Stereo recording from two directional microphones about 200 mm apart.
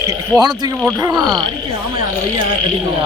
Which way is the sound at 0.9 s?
20° right (ahead or behind).